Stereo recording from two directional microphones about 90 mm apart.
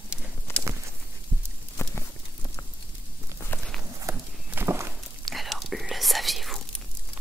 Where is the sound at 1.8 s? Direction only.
30° left (ahead or behind).